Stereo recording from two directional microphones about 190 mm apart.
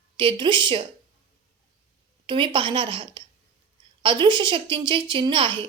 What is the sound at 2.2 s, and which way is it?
A woman's voice, 25° right (ahead or behind).